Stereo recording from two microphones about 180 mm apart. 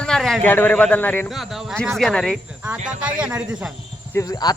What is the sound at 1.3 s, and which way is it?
A man's voice, centre (ahead or behind).